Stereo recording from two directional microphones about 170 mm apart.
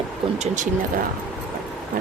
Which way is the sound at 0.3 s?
45° right (ahead or behind).